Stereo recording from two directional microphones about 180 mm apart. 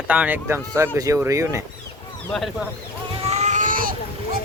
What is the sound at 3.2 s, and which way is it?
Baby cry, 40° right (ahead or behind).